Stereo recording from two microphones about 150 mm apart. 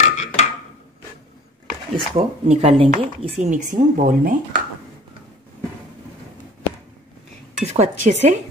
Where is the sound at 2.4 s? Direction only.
45° right (ahead or behind); by 4.4 s 65° right (ahead or behind).